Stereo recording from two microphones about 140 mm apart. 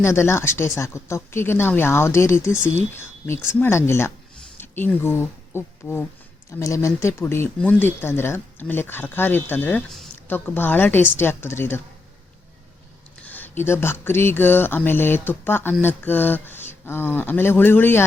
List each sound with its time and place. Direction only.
0.0 s speech: 20° left (ahead or behind)
13.2 s speech: 15° left (ahead or behind)